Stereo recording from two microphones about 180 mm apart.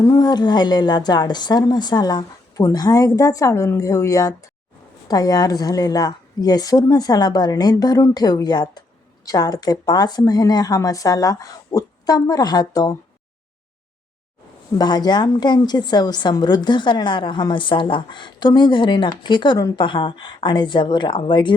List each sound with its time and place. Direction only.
0.0 s a woman's voice: 20° left (ahead or behind)
14.8 s a woman's voice: 25° left (ahead or behind)